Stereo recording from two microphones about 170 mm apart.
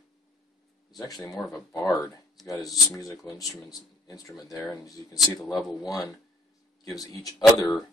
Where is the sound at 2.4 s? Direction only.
20° left (ahead or behind).